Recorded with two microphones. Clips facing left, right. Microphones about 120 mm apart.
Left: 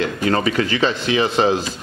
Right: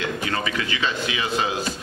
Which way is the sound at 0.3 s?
40° left (ahead or behind).